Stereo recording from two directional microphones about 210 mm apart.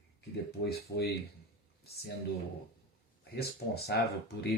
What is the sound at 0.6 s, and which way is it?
Speech, 50° left (ahead or behind).